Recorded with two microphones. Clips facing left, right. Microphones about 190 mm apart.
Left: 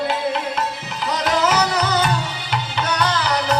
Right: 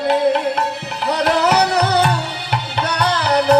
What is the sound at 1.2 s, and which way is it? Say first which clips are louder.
Music: right 3 dB; 65° right (ahead or behind).